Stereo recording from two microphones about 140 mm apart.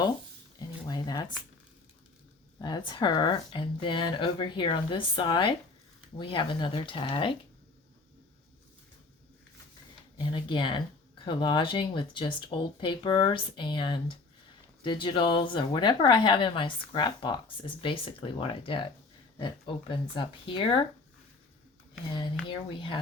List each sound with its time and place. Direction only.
0.9 s a sound: 30° left (ahead or behind)
2.6 s a woman's voice: 30° left (ahead or behind)
10.2 s a woman's voice: 35° left (ahead or behind)
22.1 s a woman's voice: 35° left (ahead or behind)